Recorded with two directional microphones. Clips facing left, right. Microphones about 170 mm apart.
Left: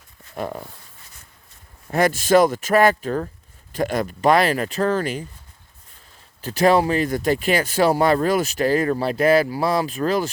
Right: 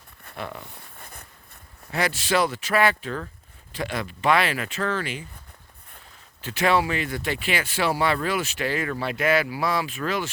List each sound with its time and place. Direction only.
0.3 s speech: 40° left (ahead or behind)
0.9 s a sound: 55° right (ahead or behind)
1.9 s speech: 45° left (ahead or behind)
6.4 s speech: 40° left (ahead or behind)